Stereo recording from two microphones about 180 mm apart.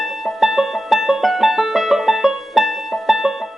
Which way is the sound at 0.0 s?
Centre (ahead or behind).